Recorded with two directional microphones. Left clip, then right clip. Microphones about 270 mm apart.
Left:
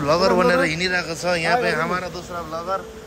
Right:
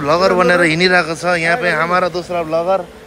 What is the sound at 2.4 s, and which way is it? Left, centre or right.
Speech, centre.